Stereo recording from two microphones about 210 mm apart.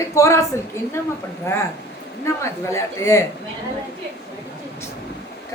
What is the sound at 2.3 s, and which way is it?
Speech, 15° left (ahead or behind).